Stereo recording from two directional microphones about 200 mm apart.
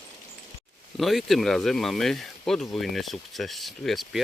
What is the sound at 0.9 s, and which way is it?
Speech, centre (ahead or behind).